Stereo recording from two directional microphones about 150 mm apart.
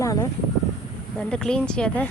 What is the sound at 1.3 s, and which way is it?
Speech, 5° left (ahead or behind).